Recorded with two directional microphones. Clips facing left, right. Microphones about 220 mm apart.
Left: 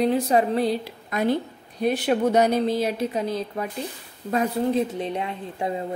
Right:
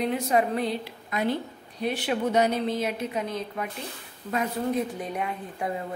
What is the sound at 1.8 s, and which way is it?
A woman's voice, 40° left (ahead or behind).